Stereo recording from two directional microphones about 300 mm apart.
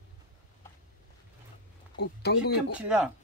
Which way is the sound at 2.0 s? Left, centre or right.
Left.